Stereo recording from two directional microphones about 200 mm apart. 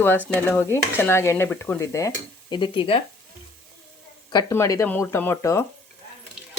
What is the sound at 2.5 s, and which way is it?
Speech, 25° left (ahead or behind).